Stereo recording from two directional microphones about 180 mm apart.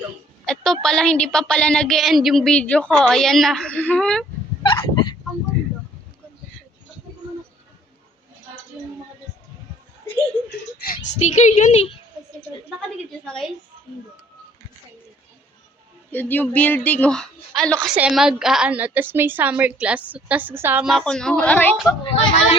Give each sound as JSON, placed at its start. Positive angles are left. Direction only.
{"t": 0.4, "sound": "a sound", "side_deg": 5}
{"t": 4.6, "sound": "fowl", "side_deg": 25}
{"t": 11.2, "sound": "speech", "side_deg": 40}
{"t": 13.2, "sound": "a sound", "side_deg": 0}
{"t": 16.1, "sound": "a woman's voice", "side_deg": 10}
{"t": 22.0, "sound": "speech", "side_deg": 30}